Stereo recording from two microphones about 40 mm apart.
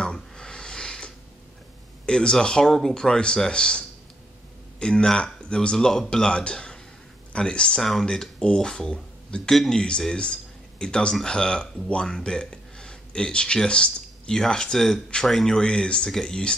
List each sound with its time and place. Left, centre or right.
0.1 s a sound: left
2.0 s speech: left
15.6 s speech: left